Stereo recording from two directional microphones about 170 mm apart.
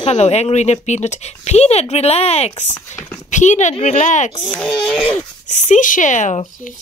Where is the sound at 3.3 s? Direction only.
45° left (ahead or behind).